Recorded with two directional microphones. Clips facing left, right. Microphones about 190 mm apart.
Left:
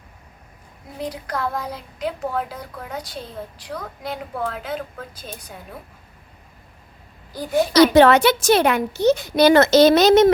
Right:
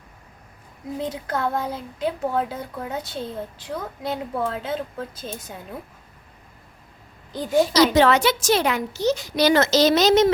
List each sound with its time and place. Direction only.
1.0 s a woman's voice: 25° right (ahead or behind)
7.7 s a woman's voice: 60° left (ahead or behind)